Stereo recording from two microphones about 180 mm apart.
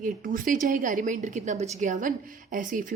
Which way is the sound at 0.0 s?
50° right (ahead or behind).